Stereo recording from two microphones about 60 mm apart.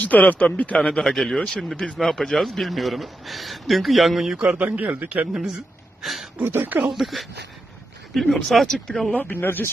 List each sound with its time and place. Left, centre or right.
0.0 s a man's voice: left
0.7 s a man's voice: centre
4.4 s a man's voice: right
5.1 s speech: centre
6.4 s speech: right
6.8 s a man's voice: centre
9.1 s speech: left